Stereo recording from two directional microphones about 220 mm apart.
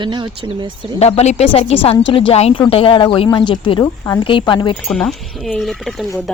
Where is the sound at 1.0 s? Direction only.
30° left (ahead or behind).